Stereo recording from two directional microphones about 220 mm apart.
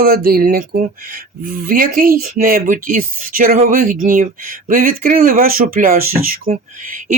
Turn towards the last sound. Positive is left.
turn(degrees=-35)  # may be behind; listen again after turning